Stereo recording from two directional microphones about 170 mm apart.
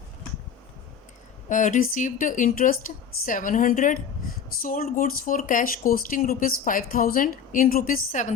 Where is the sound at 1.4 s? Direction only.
50° left (ahead or behind).